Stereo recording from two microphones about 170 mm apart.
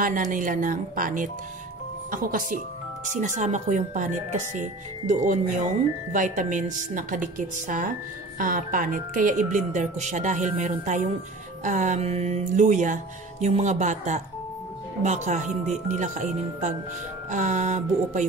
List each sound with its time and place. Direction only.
0.0 s speech: 50° right (ahead or behind)